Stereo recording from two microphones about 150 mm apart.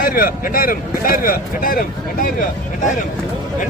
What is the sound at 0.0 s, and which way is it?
Speech, 75° left (ahead or behind).